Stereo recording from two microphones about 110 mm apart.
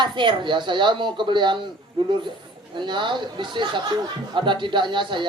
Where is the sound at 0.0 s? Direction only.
45° right (ahead or behind).